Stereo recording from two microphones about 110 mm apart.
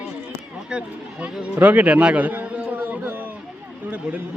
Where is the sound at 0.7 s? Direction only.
10° right (ahead or behind).